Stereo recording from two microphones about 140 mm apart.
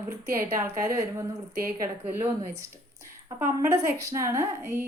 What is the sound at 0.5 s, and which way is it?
Speech, 25° right (ahead or behind).